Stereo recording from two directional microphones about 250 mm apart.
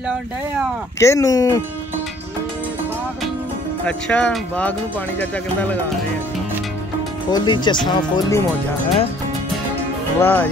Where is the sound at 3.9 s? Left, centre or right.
Centre.